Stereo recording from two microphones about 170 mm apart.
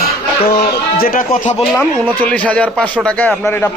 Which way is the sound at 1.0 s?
55° left (ahead or behind).